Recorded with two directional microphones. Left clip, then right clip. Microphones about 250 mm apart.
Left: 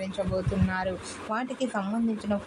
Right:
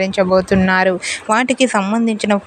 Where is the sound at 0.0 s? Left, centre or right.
Right.